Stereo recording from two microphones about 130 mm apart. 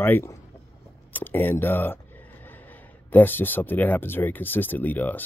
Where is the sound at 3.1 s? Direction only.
15° left (ahead or behind).